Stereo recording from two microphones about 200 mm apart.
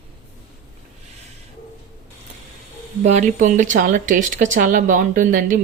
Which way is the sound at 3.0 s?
35° right (ahead or behind).